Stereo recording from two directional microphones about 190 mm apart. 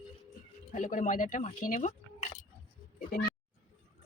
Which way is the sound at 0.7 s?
45° left (ahead or behind).